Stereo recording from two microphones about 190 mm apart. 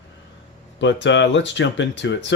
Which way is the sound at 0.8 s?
70° left (ahead or behind).